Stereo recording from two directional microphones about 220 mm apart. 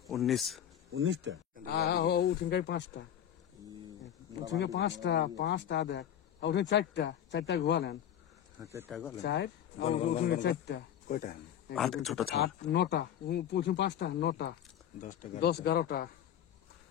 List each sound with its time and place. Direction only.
0.1 s speech: centre (ahead or behind)
0.9 s speech: 60° right (ahead or behind)
1.7 s speech: 45° left (ahead or behind)
4.7 s speech: 55° left (ahead or behind)
8.6 s speech: 15° right (ahead or behind)
9.2 s speech: 50° left (ahead or behind)
9.8 s speech: 30° left (ahead or behind)
10.2 s speech: 45° left (ahead or behind)
11.7 s speech: centre (ahead or behind)
12.7 s speech: 50° left (ahead or behind)
15.0 s speech: 35° left (ahead or behind)